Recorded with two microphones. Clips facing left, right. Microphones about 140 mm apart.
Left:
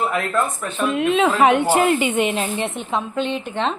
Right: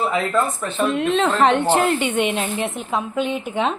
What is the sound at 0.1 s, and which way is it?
Speech, 5° left (ahead or behind).